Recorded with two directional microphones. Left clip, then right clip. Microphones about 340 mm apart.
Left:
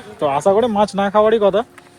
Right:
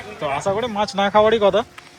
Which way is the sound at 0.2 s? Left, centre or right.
Centre.